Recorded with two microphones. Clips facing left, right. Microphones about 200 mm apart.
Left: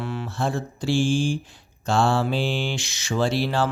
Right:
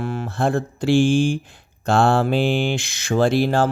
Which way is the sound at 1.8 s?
60° right (ahead or behind).